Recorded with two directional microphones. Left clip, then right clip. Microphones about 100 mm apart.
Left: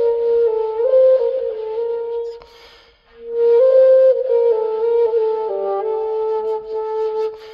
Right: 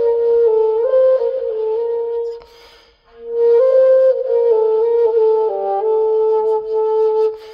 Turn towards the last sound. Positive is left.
turn(degrees=40)  # may be behind; listen again after turning